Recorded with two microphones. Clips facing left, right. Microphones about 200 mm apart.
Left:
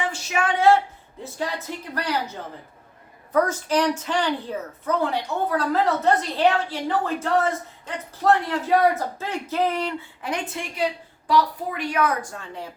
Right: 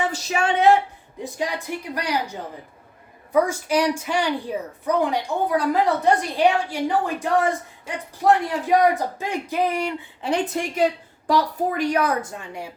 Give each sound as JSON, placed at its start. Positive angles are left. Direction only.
{"t": 0.1, "sound": "speech", "side_deg": -35}
{"t": 1.2, "sound": "a woman's voice", "side_deg": -15}
{"t": 10.2, "sound": "a woman's voice", "side_deg": -35}
{"t": 12.2, "sound": "a woman's voice", "side_deg": -20}